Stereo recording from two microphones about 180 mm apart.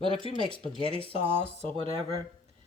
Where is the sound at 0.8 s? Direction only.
30° left (ahead or behind).